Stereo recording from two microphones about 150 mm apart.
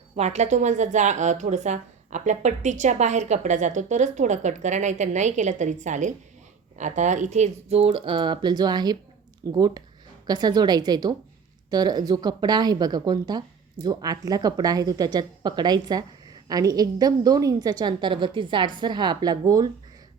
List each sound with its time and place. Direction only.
0.2 s a woman's voice: 50° right (ahead or behind); by 19.6 s 25° right (ahead or behind)